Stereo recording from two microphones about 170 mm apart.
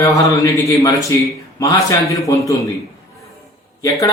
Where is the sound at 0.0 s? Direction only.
20° left (ahead or behind).